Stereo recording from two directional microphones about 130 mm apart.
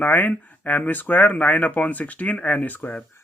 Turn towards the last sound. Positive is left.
turn(degrees=15)  # may be behind; listen again after turning